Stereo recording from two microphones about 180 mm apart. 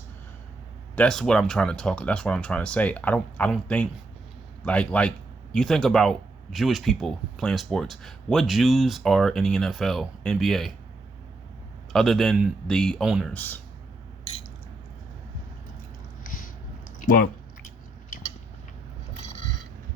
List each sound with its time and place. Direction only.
0.9 s a man's voice: 5° left (ahead or behind)
11.9 s speech: centre (ahead or behind)
13.3 s a man's voice: 10° left (ahead or behind)
16.2 s a sound: 50° left (ahead or behind)